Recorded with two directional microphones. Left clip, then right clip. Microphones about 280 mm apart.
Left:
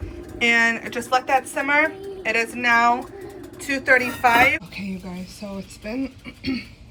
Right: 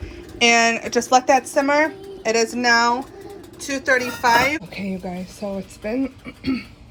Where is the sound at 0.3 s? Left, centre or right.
Centre.